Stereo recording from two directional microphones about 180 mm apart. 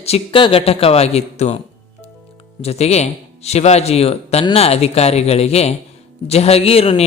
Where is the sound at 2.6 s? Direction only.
35° left (ahead or behind).